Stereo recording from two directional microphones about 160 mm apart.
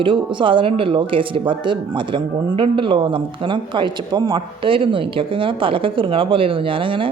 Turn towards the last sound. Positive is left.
turn(degrees=-35)  # may be behind; listen again after turning